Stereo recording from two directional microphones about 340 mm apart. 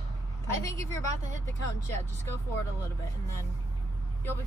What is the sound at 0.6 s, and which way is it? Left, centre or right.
Speech, centre.